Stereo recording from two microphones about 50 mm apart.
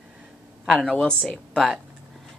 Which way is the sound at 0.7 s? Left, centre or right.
Centre.